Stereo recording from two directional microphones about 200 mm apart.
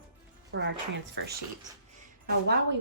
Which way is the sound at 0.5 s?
65° right (ahead or behind).